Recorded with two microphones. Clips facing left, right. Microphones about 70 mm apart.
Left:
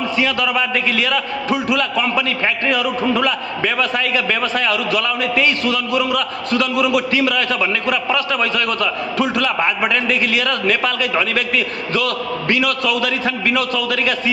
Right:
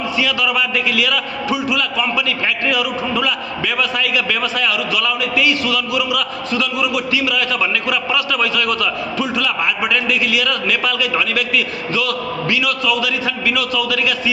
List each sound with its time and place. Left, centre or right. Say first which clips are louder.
0.2 s a man's voice: even; left
6.5 s a man's voice: left 4 dB; left
9.1 s a man's voice: left 4 dB; left
9.6 s a man's voice: left 1 dB; left